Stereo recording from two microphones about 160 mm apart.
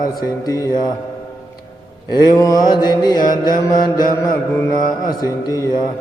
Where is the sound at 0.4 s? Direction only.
25° left (ahead or behind).